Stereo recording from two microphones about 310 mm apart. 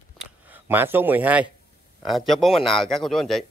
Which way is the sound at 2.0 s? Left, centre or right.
Centre.